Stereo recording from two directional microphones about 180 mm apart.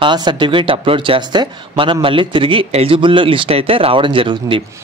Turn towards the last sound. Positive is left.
turn(degrees=-30)  # may be behind; listen again after turning